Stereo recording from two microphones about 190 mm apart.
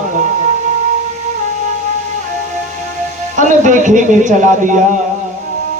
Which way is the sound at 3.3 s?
40° right (ahead or behind).